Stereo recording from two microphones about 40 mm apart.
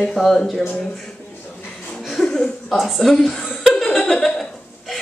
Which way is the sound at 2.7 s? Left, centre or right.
Centre.